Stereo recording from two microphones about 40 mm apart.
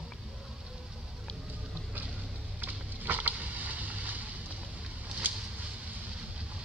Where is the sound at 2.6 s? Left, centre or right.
Right.